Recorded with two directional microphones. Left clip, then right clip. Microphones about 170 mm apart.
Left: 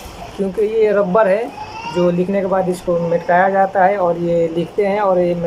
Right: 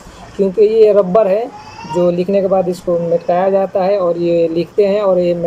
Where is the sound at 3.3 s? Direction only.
20° right (ahead or behind).